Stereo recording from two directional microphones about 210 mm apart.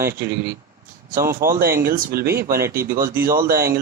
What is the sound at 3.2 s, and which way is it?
Speech, 45° right (ahead or behind).